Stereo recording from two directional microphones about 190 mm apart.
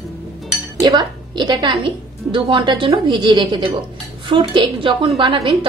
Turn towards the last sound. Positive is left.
turn(degrees=-25)  # may be behind; listen again after turning